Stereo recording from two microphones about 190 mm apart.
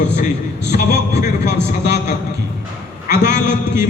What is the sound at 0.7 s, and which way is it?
Speech, 60° left (ahead or behind).